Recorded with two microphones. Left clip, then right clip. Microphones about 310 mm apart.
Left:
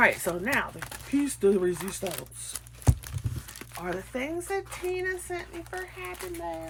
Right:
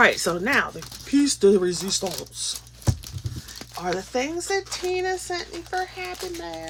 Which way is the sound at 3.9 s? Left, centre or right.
Centre.